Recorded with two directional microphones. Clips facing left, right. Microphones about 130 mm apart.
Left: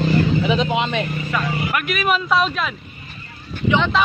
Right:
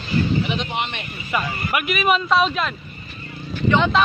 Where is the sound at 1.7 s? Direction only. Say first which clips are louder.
Right 3 dB; 5° right (ahead or behind).